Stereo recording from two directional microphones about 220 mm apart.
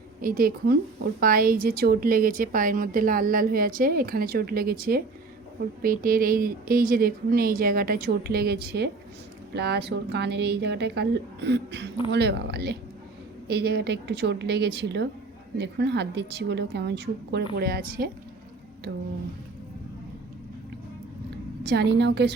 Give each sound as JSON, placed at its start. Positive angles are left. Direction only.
{"t": 0.2, "sound": "a woman's voice", "side_deg": -40}
{"t": 21.6, "sound": "a woman's voice", "side_deg": -50}